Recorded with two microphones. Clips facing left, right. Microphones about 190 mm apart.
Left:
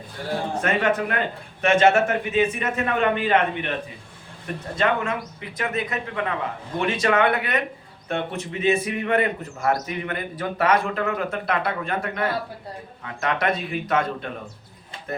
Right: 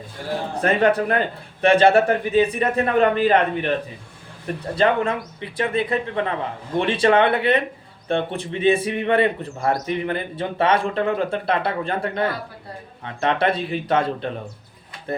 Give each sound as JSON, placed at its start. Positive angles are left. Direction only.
{"t": 0.6, "sound": "speech", "side_deg": -35}
{"t": 4.7, "sound": "speech", "side_deg": -35}